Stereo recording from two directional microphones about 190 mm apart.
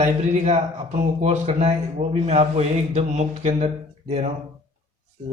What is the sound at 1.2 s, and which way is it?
A man's voice, 35° right (ahead or behind).